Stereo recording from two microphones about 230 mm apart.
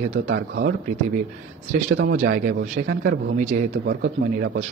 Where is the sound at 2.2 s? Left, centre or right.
Right.